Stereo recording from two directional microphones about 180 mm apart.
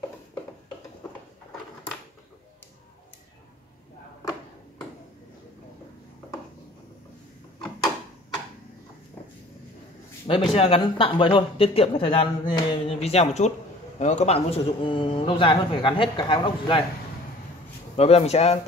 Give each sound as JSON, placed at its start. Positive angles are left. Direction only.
{"t": 10.5, "sound": "a man's voice", "side_deg": 30}
{"t": 17.9, "sound": "speech", "side_deg": 35}